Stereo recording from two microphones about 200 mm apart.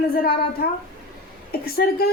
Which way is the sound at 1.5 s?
50° left (ahead or behind).